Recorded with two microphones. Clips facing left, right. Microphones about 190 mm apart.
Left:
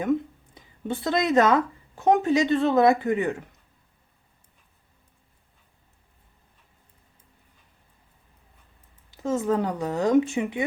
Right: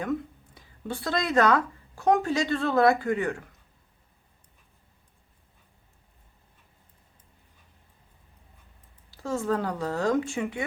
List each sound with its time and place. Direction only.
0.0 s speech: 20° left (ahead or behind)
9.0 s speech: 20° left (ahead or behind)